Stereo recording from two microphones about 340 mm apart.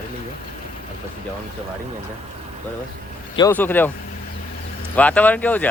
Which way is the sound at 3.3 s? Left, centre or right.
Centre.